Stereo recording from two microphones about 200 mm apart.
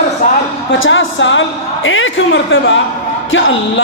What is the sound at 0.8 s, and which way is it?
A woman's voice, 70° left (ahead or behind).